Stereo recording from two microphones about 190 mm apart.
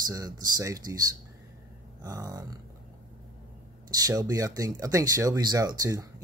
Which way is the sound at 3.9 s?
20° right (ahead or behind).